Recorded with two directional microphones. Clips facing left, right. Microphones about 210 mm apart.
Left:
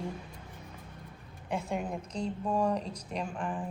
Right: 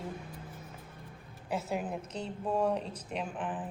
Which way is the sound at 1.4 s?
5° right (ahead or behind).